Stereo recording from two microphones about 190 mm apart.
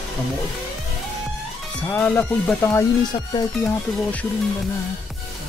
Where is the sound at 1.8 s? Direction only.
10° left (ahead or behind).